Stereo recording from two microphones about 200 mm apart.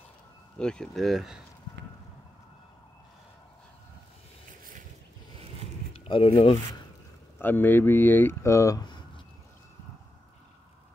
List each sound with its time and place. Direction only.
0.6 s speech: 5° left (ahead or behind)
5.9 s speech: 25° left (ahead or behind)
7.3 s speech: 10° left (ahead or behind)